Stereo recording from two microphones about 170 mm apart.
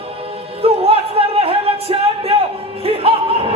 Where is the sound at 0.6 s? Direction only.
35° right (ahead or behind).